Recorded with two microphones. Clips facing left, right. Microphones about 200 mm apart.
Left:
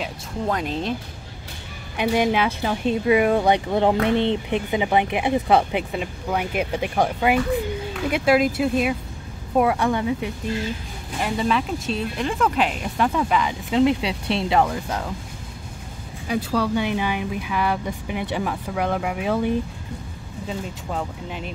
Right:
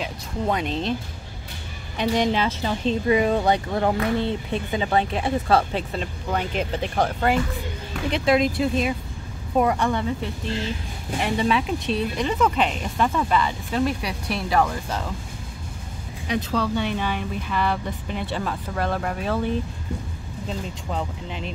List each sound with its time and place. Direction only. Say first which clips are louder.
0.0 s speech: even; centre (ahead or behind)
2.0 s speech: left 2 dB; 10° left (ahead or behind)
11.1 s speech: even; centre (ahead or behind); by 15.0 s 15° left (ahead or behind)
16.3 s speech: left 2 dB; 10° left (ahead or behind)
20.4 s speech: left 1 dB; 5° left (ahead or behind)